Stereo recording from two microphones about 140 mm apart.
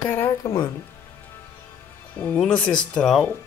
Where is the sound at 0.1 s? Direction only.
20° left (ahead or behind).